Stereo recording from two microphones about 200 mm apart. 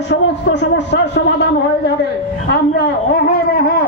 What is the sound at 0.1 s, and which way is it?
A man's voice, 60° left (ahead or behind).